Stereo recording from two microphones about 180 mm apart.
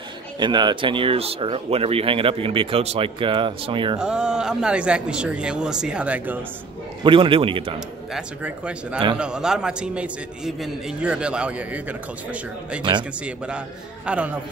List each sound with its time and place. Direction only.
0.4 s speech: 25° right (ahead or behind)
4.0 s a man's voice: 5° right (ahead or behind)
7.0 s speech: 30° right (ahead or behind)
8.1 s a man's voice: 5° right (ahead or behind)
14.0 s speech: 5° right (ahead or behind)